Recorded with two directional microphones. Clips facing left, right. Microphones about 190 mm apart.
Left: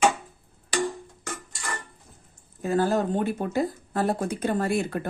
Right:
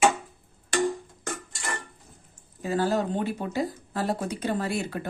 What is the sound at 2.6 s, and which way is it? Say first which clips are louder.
Speech: left 2 dB; 50° left (ahead or behind).